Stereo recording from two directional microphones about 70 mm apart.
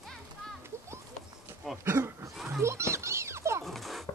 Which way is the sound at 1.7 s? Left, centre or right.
Right.